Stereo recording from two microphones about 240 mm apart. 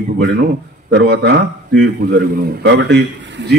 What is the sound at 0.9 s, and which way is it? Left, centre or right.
Speech, right.